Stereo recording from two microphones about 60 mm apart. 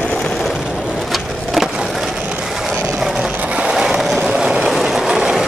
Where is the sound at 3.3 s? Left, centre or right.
Right.